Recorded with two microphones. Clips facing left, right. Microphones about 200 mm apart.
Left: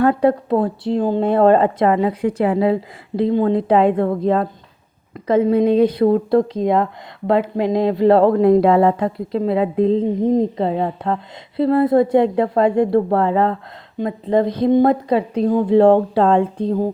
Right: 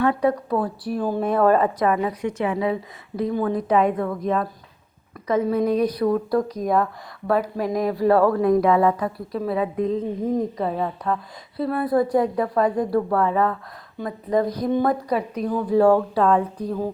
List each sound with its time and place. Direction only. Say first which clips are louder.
0.2 s speech: left 5 dB; 30° left (ahead or behind)